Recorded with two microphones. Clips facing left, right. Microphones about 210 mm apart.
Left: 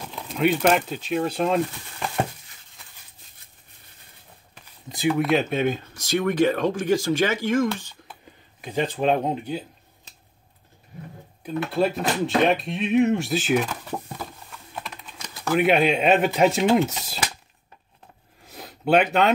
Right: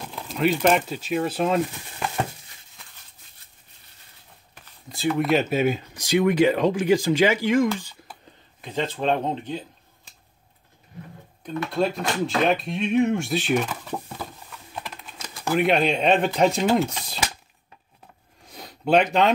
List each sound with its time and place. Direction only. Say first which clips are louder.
0.1 s speech: left 1 dB; centre (ahead or behind)
4.8 s a sound: left 2 dB; 20° left (ahead or behind)
5.1 s speech: right 1 dB; centre (ahead or behind)
8.5 s speech: left 2 dB; 15° left (ahead or behind)
11.4 s speech: left 1 dB; centre (ahead or behind)
18.4 s a sound: left 1 dB; 5° left (ahead or behind)